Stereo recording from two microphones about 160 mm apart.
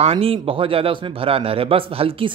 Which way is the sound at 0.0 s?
35° right (ahead or behind).